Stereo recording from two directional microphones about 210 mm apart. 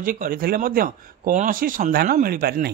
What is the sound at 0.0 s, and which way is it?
Speech, 40° right (ahead or behind).